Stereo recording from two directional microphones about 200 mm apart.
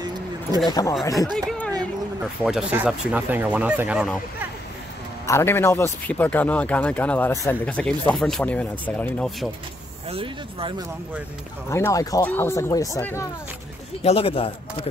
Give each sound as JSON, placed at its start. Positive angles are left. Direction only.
{"t": 0.7, "sound": "speech", "side_deg": 20}
{"t": 1.1, "sound": "speech", "side_deg": 0}
{"t": 5.2, "sound": "speech", "side_deg": 15}
{"t": 10.0, "sound": "speech", "side_deg": -25}
{"t": 11.7, "sound": "speech", "side_deg": 15}
{"t": 14.0, "sound": "speech", "side_deg": 30}